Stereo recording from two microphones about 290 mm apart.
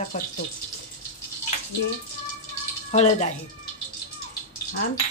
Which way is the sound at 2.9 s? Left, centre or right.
Left.